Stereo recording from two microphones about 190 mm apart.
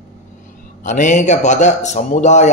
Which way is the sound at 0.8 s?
40° left (ahead or behind).